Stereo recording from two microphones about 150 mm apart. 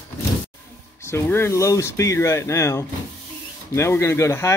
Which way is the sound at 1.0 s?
15° left (ahead or behind).